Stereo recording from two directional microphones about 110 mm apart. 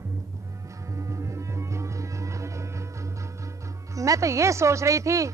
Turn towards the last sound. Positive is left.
turn(degrees=-30)  # may be behind; listen again after turning